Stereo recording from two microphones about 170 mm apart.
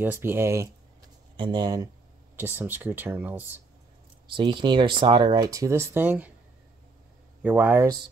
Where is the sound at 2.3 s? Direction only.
10° right (ahead or behind).